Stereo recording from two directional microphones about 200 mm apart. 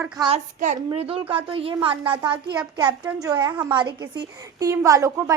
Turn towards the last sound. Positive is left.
turn(degrees=-15)  # may be behind; listen again after turning